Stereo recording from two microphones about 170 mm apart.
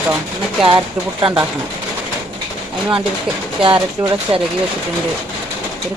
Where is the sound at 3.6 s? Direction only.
30° right (ahead or behind).